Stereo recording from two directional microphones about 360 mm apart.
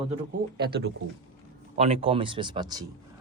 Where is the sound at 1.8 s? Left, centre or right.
Centre.